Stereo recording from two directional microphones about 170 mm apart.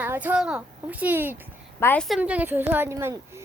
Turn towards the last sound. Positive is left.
turn(degrees=-15)  # may be behind; listen again after turning